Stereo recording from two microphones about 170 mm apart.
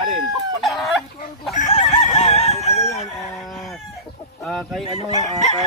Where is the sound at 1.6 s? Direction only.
35° left (ahead or behind).